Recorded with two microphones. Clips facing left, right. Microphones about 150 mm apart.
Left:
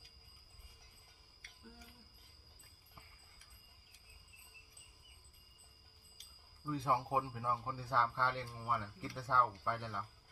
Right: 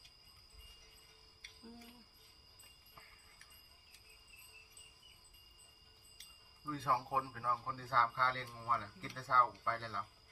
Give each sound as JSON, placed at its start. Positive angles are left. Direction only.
{"t": 6.7, "sound": "speech", "side_deg": 15}